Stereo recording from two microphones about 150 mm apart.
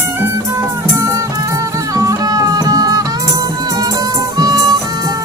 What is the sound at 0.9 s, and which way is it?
Music, 20° right (ahead or behind).